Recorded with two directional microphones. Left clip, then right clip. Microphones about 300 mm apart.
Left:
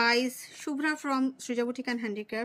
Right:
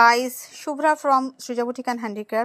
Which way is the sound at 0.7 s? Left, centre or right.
Right.